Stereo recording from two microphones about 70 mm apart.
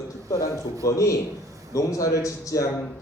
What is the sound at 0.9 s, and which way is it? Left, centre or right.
Speech, left.